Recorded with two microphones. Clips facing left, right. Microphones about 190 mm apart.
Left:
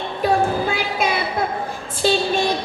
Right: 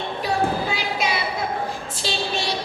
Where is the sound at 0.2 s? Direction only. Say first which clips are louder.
Left 5 dB; 50° left (ahead or behind).